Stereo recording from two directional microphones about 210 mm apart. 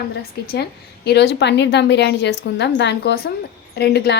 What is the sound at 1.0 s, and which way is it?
A woman's voice, 55° left (ahead or behind).